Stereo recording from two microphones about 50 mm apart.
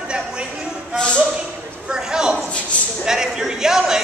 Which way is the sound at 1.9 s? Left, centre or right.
Centre.